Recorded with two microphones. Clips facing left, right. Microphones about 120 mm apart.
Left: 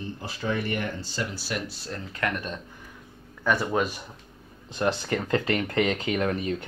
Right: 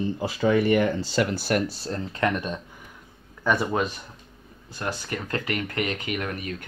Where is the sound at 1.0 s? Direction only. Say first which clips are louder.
Right 8 dB; 80° right; by 1.7 s 50° right (ahead or behind).